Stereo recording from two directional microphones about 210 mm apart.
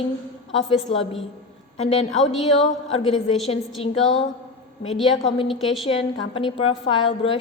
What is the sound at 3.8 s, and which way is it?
Speech, 30° left (ahead or behind).